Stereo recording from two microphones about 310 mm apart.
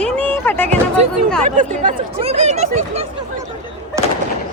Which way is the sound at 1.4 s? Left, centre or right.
Right.